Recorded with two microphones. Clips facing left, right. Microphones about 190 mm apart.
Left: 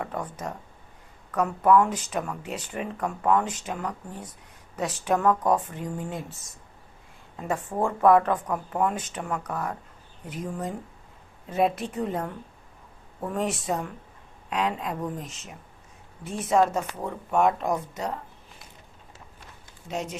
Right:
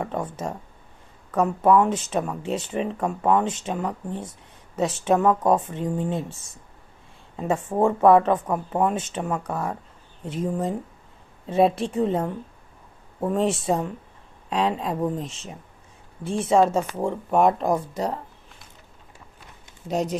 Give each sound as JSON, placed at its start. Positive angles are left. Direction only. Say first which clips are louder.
{"t": 0.0, "sound": "a sound", "louder": "right 4 dB", "side_deg": -25}
{"t": 1.3, "sound": "speech", "louder": "right 2 dB", "side_deg": -25}
{"t": 19.9, "sound": "speech", "louder": "right 7 dB", "side_deg": -35}